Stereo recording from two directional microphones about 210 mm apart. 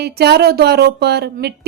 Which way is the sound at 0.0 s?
50° right (ahead or behind).